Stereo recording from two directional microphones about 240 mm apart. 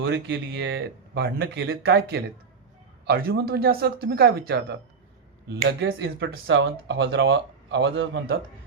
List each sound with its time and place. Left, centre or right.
0.0 s speech: right